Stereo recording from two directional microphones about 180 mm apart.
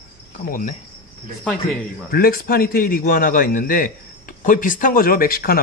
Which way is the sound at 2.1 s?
55° left (ahead or behind).